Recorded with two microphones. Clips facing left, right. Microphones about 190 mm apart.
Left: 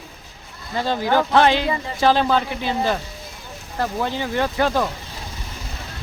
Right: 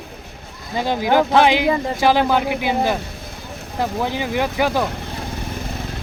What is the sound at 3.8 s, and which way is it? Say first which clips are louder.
Speech: right 2 dB; 15° right (ahead or behind).